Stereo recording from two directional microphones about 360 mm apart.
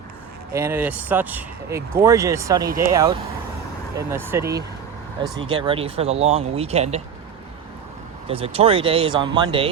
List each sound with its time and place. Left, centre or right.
0.5 s speech: centre
4.3 s speech: centre
8.3 s speech: centre